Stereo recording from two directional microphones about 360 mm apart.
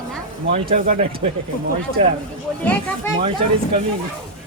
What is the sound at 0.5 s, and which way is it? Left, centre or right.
Speech, centre.